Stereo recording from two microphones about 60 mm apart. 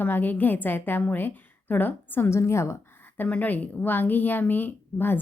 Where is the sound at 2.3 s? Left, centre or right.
Left.